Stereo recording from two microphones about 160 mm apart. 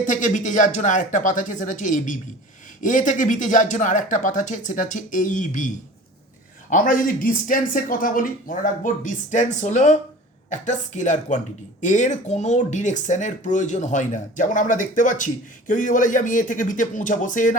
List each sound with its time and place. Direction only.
0.0 s speech: 50° left (ahead or behind)